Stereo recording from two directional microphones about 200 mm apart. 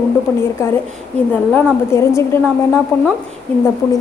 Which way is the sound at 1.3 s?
10° left (ahead or behind).